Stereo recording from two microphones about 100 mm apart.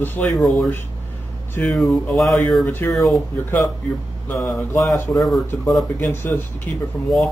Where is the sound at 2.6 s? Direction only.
20° left (ahead or behind).